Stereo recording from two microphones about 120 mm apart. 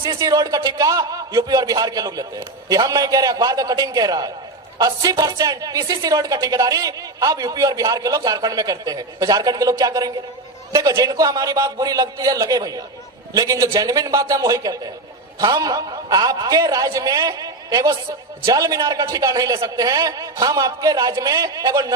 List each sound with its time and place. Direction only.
0.2 s speech: 30° right (ahead or behind)